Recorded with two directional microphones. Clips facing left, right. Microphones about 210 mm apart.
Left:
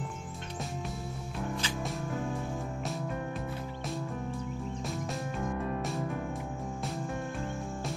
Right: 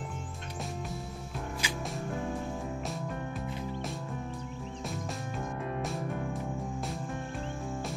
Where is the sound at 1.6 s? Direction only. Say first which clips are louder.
Even; 10° right (ahead or behind).